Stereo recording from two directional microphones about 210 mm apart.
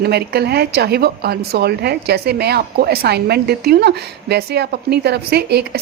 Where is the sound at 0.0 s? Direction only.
50° right (ahead or behind).